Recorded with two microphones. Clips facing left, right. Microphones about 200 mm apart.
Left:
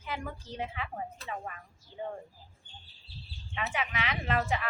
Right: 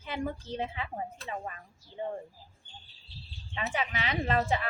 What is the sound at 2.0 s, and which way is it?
Speech, 25° right (ahead or behind).